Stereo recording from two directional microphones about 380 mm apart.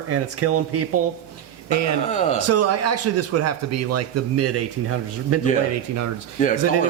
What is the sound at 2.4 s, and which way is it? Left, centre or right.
Speech, right.